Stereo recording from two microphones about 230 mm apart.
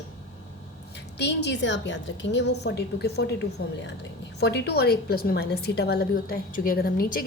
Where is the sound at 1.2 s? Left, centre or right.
Left.